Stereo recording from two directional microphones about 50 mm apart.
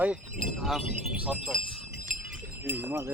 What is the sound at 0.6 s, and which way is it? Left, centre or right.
Speech, centre.